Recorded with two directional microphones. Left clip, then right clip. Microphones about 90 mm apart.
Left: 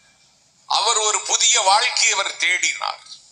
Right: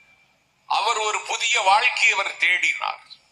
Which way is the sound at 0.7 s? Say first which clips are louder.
Left 3 dB; 35° left (ahead or behind).